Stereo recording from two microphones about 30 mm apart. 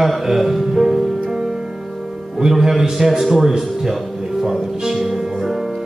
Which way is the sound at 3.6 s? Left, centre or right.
Centre.